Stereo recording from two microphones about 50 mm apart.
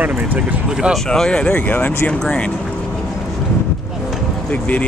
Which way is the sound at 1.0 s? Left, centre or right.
Centre.